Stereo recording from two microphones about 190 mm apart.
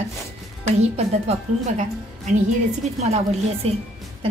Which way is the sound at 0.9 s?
35° right (ahead or behind).